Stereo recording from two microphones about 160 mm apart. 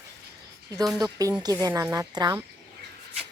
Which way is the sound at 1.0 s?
20° right (ahead or behind).